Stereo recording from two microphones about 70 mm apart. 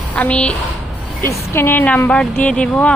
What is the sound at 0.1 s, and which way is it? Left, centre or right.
Speech, centre.